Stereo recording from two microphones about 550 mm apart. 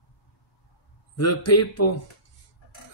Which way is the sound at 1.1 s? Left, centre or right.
Left.